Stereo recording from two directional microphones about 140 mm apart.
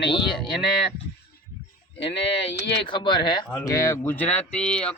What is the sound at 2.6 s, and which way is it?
Speech, 35° left (ahead or behind).